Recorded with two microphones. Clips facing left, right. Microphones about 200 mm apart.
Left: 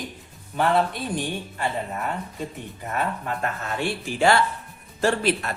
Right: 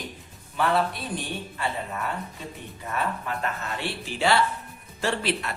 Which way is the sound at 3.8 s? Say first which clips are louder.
Left 5 dB; 50° left (ahead or behind).